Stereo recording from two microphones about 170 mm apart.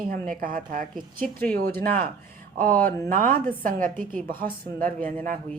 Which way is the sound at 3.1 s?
55° right (ahead or behind).